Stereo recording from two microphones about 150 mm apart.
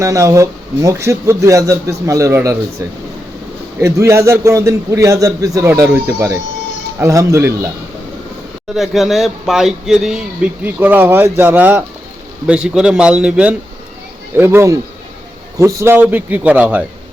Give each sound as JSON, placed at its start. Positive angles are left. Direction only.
{"t": 0.0, "sound": "speech", "side_deg": -20}
{"t": 8.7, "sound": "a man's voice", "side_deg": 0}